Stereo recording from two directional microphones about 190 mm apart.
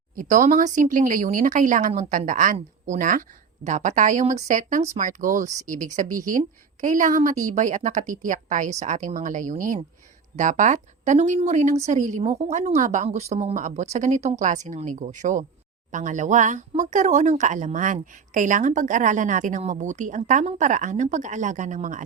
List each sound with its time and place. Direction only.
0.2 s speech: 40° right (ahead or behind)